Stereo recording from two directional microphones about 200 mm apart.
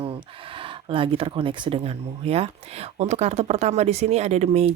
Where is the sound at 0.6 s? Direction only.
25° right (ahead or behind).